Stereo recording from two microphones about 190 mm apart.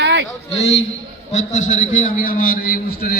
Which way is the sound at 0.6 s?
35° left (ahead or behind).